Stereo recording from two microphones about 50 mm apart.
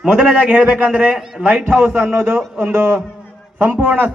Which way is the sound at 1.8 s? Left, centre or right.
Right.